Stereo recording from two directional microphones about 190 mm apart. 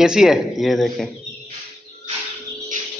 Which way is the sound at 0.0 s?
Centre (ahead or behind).